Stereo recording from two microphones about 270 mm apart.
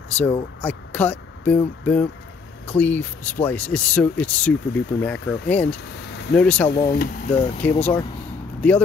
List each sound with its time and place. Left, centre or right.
0.2 s speech: centre
6.7 s speech: left
7.3 s speech: left
7.6 s speech: centre